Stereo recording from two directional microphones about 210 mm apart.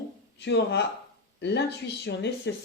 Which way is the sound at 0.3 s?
55° left (ahead or behind).